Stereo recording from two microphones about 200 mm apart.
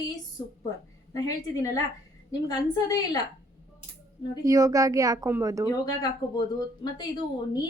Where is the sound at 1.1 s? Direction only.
15° left (ahead or behind).